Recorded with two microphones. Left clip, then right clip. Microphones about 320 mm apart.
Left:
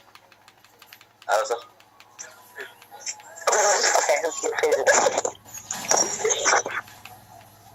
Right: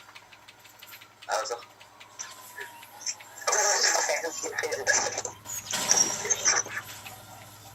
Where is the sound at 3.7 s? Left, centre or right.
Centre.